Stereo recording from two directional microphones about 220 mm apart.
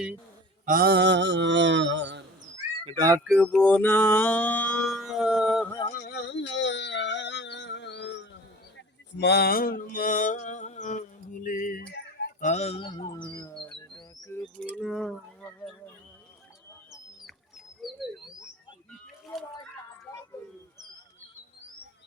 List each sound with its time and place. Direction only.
0.6 s mantra: 40° right (ahead or behind)
2.8 s speech: 15° right (ahead or behind)
3.2 s music: centre (ahead or behind)
5.6 s a sound: 15° left (ahead or behind)
5.9 s a sound: 50° left (ahead or behind)
9.1 s mantra: 50° left (ahead or behind)
9.9 s music: 40° left (ahead or behind)
11.4 s speech: 35° left (ahead or behind); by 13.6 s 20° left (ahead or behind)
13.9 s bird: 15° left (ahead or behind)
17.8 s bird: centre (ahead or behind)